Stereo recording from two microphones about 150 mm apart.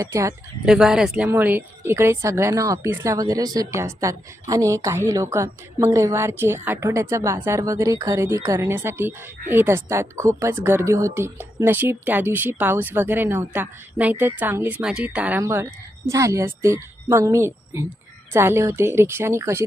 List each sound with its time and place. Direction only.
0.0 s speech: 20° right (ahead or behind)
0.6 s speech: 5° right (ahead or behind)